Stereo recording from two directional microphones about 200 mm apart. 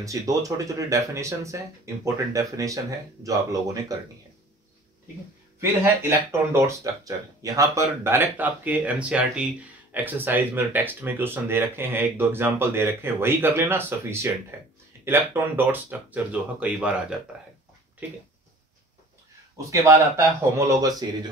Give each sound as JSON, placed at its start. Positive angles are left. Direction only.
{"t": 0.0, "sound": "speech", "side_deg": -15}
{"t": 5.6, "sound": "speech", "side_deg": -10}
{"t": 19.5, "sound": "speech", "side_deg": -15}